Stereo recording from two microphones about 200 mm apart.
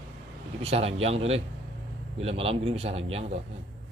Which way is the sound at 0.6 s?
30° right (ahead or behind).